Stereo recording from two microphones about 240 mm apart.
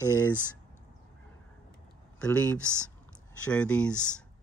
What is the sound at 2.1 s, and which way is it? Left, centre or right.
Speech, centre.